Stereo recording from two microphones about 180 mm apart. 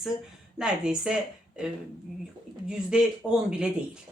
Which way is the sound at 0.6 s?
5° right (ahead or behind).